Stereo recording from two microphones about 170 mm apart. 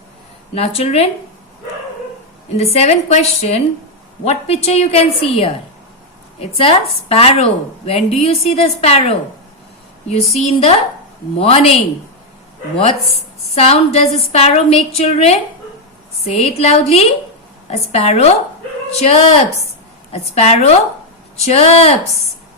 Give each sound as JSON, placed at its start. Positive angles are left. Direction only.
{"t": 0.5, "sound": "a woman's voice", "side_deg": 35}
{"t": 2.7, "sound": "a woman's voice", "side_deg": 40}
{"t": 10.3, "sound": "a woman's voice", "side_deg": 40}
{"t": 13.5, "sound": "a woman's voice", "side_deg": 35}